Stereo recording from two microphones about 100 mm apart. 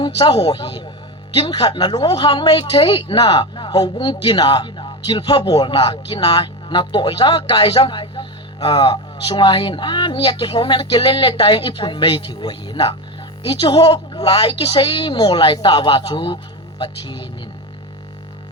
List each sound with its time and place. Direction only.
0.0 s a woman's voice: 60° left (ahead or behind)
5.5 s a woman's voice: 50° left (ahead or behind)